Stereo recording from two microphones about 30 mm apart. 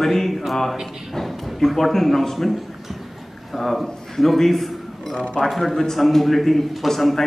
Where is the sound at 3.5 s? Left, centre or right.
Centre.